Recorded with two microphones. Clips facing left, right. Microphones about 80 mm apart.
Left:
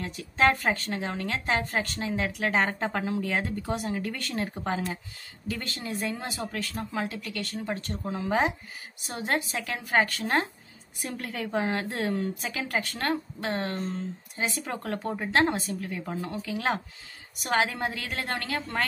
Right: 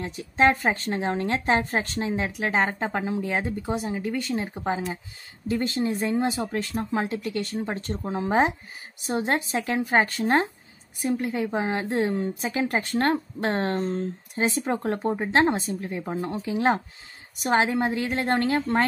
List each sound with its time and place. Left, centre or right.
0.0 s a woman's voice: right
11.1 s a woman's voice: centre; by 14.6 s right
14.6 s a woman's voice: right